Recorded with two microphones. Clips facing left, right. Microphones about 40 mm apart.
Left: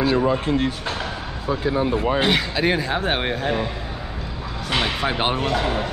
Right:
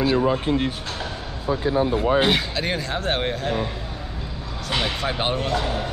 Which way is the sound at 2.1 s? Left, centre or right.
Centre.